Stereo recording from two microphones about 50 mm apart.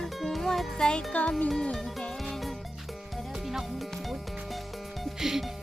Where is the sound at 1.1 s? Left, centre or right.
Left.